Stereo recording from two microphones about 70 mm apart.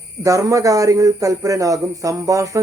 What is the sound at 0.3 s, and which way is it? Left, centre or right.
Speech, right.